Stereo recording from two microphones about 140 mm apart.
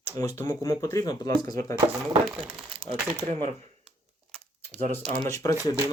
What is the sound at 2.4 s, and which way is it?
Speech, 40° right (ahead or behind).